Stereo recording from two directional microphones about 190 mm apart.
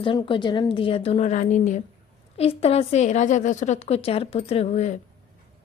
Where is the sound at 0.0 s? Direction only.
25° left (ahead or behind).